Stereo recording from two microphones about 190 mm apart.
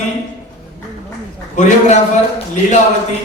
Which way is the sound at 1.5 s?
40° left (ahead or behind).